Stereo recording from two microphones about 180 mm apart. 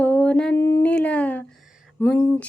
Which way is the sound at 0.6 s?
15° left (ahead or behind).